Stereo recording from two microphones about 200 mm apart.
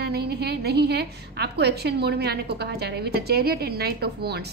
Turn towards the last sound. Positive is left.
turn(degrees=-50)  # may be behind; listen again after turning